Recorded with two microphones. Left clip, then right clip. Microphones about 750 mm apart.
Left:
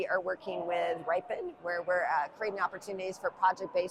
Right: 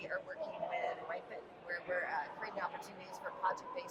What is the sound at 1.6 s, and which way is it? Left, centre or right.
A woman's voice, left.